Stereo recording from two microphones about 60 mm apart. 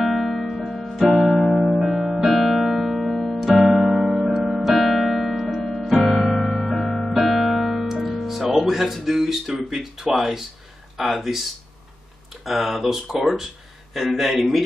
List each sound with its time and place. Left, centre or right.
0.0 s music: centre
11.0 s speech: centre
12.4 s speech: centre